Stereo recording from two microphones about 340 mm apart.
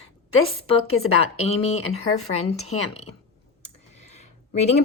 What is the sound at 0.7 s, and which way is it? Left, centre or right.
Speech, left.